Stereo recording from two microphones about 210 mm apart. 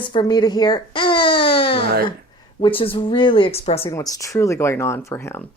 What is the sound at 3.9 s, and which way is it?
Speech, 15° left (ahead or behind).